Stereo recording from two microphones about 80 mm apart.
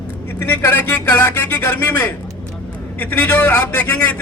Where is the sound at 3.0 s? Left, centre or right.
Centre.